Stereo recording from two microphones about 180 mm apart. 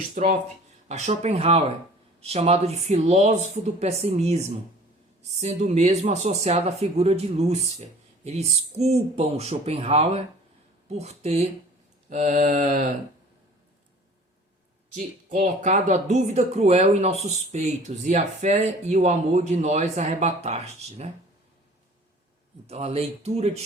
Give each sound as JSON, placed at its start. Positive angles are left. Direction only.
{"t": 0.1, "sound": "mantra", "side_deg": -45}
{"t": 0.9, "sound": "speech", "side_deg": -40}
{"t": 12.0, "sound": "mantra", "side_deg": -45}
{"t": 14.9, "sound": "speech", "side_deg": -40}
{"t": 22.6, "sound": "speech", "side_deg": -35}